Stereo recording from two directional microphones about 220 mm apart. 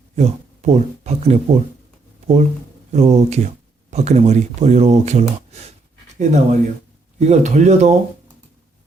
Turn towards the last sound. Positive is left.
turn(degrees=-30)  # may be behind; listen again after turning